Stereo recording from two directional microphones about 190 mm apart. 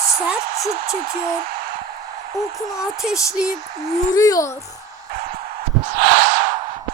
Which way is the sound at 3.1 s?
15° left (ahead or behind).